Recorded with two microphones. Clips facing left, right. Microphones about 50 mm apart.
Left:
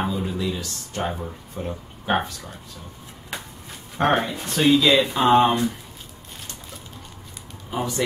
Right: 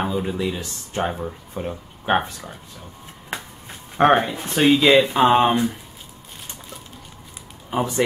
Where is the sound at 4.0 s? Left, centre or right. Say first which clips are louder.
Right 5 dB; right.